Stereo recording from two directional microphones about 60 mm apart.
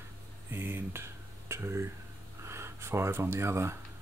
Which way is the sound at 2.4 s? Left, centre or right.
Right.